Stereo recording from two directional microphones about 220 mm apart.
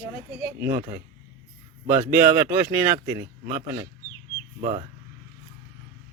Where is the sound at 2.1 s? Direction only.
10° right (ahead or behind).